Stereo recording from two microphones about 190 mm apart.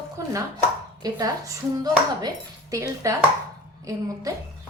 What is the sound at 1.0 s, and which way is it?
A woman's voice, 20° right (ahead or behind).